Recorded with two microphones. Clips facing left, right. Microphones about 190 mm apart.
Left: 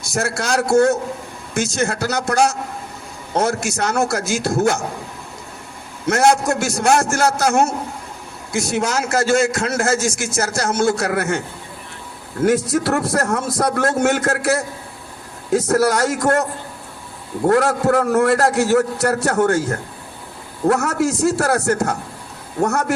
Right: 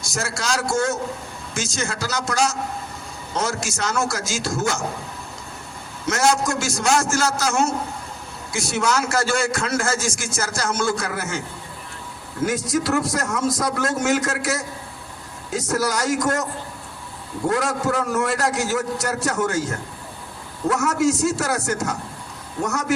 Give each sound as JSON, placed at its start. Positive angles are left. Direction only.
{"t": 0.0, "sound": "a man's voice", "side_deg": 60}
{"t": 6.1, "sound": "a man's voice", "side_deg": 60}
{"t": 9.2, "sound": "a man's voice", "side_deg": 50}
{"t": 12.5, "sound": "a man's voice", "side_deg": 60}